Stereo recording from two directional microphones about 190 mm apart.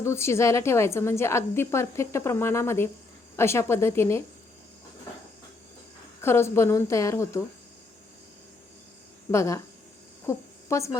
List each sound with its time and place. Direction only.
0.0 s a woman's voice: 15° left (ahead or behind)
6.2 s a woman's voice: 15° left (ahead or behind)
9.3 s a woman's voice: 15° left (ahead or behind)
10.2 s a sound: 15° left (ahead or behind)